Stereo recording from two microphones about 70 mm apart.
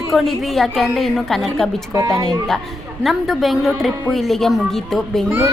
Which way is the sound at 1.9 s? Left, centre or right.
Right.